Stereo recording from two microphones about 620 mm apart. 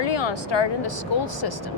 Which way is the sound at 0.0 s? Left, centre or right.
Left.